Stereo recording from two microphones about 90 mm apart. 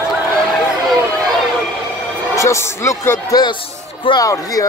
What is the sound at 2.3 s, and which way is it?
Music, 35° left (ahead or behind).